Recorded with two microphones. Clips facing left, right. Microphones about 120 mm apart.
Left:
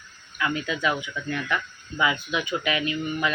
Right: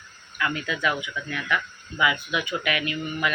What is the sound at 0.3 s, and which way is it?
Speech, 20° left (ahead or behind).